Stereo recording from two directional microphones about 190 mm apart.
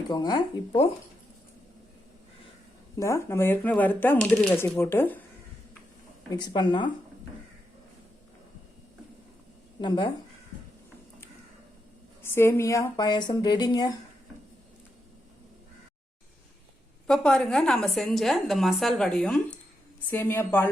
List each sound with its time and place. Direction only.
0.1 s speech: 20° left (ahead or behind)
3.0 s speech: 15° left (ahead or behind)
6.3 s speech: 25° left (ahead or behind)
9.8 s speech: 25° left (ahead or behind)
12.2 s speech: 15° left (ahead or behind)
17.1 s a woman's voice: 5° left (ahead or behind)